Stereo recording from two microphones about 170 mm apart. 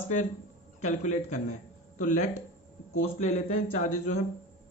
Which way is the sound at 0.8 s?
45° left (ahead or behind).